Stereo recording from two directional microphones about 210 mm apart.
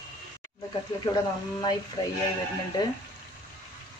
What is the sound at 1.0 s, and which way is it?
Speech, 20° left (ahead or behind).